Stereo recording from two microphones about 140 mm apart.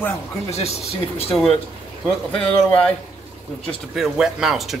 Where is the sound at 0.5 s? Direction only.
50° left (ahead or behind).